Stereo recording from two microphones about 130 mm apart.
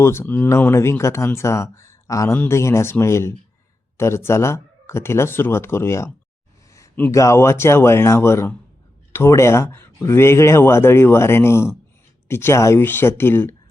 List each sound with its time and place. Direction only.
0.0 s speech: 20° left (ahead or behind)
6.7 s a sound: 25° left (ahead or behind)
7.1 s speech: 25° left (ahead or behind)